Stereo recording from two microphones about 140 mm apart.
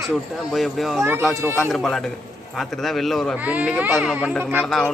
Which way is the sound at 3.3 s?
10° right (ahead or behind).